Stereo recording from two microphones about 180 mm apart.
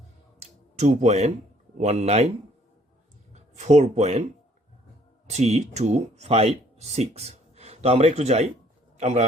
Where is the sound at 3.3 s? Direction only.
40° right (ahead or behind).